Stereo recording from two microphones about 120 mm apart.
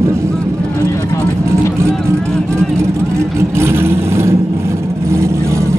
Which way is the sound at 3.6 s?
20° right (ahead or behind).